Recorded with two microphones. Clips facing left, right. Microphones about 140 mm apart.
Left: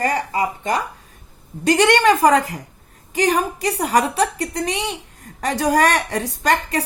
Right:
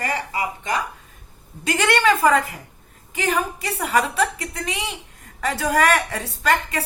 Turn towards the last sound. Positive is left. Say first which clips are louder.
# left 2 dB
turn(degrees=35)  # may be behind; listen again after turning